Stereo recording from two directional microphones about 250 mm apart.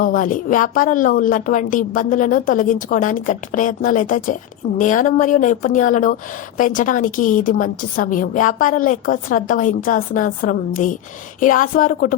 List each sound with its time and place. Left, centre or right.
0.0 s a woman's voice: left